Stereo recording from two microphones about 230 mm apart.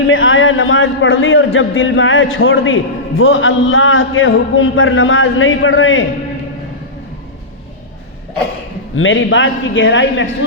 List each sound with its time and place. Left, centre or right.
0.1 s a man's voice: left
9.0 s a man's voice: left